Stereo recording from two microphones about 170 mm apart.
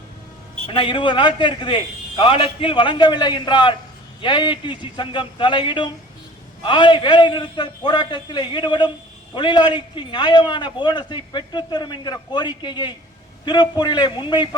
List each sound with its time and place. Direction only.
0.7 s a man's voice: 30° left (ahead or behind)